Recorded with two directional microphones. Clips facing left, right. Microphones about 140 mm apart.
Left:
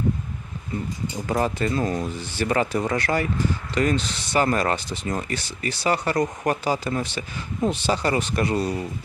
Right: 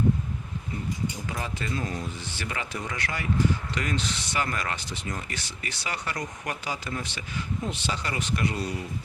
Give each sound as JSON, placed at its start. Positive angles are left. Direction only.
{"t": 1.3, "sound": "speech", "side_deg": 45}